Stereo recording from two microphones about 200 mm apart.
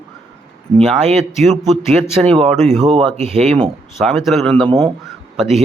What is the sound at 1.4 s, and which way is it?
Speech, centre (ahead or behind).